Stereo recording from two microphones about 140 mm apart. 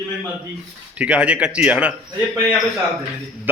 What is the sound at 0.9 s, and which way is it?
A man's voice, 10° right (ahead or behind).